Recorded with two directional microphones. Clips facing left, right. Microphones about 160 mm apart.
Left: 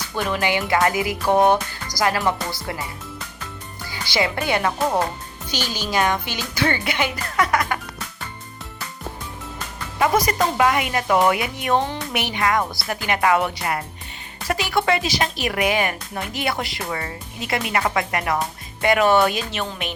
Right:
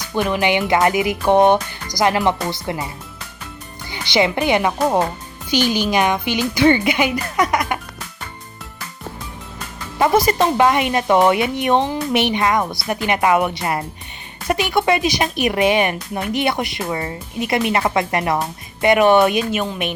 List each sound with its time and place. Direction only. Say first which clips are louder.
0.3 s speech: right 3 dB; 20° right (ahead or behind)
3.9 s speech: right 5 dB; 20° right (ahead or behind)
10.0 s speech: right 4 dB; 25° right (ahead or behind)